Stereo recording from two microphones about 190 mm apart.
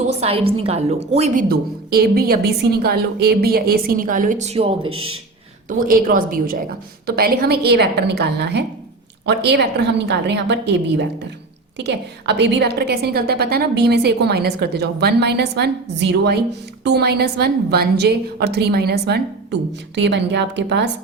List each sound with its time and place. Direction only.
0.2 s a woman's voice: 30° right (ahead or behind)
4.9 s speech: 90° right
5.6 s a woman's voice: 45° right (ahead or behind); by 20.9 s 65° right (ahead or behind)